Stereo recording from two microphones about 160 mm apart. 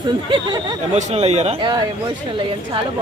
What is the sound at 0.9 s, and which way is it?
Speech, 40° right (ahead or behind).